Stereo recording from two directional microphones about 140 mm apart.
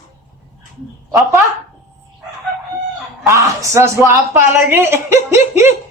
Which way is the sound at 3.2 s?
20° right (ahead or behind).